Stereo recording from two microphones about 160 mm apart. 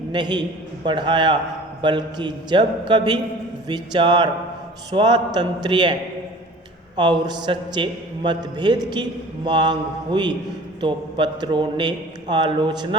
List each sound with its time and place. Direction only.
0.1 s a man's voice: 25° right (ahead or behind)